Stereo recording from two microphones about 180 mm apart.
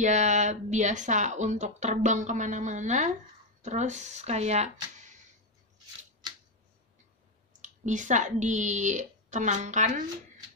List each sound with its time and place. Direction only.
0.0 s speech: 40° right (ahead or behind)
7.6 s speech: 45° right (ahead or behind)